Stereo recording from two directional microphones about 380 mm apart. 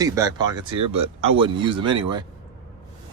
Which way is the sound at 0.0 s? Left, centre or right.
Centre.